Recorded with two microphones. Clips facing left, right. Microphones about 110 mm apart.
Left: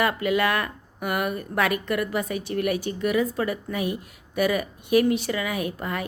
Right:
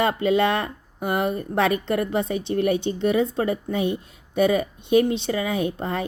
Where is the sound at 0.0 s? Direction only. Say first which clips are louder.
Right 3 dB; 25° right (ahead or behind).